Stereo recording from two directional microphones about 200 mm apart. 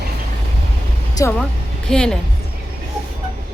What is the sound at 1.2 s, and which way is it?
Speech, 20° left (ahead or behind).